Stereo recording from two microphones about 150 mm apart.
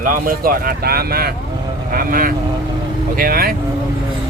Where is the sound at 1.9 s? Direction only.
75° right (ahead or behind).